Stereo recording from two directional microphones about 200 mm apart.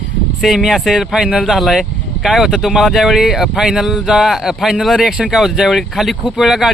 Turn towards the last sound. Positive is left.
turn(degrees=0)  # may be behind; listen again after turning